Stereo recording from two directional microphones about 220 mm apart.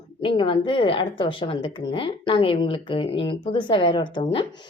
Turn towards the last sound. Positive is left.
turn(degrees=25)  # may be behind; listen again after turning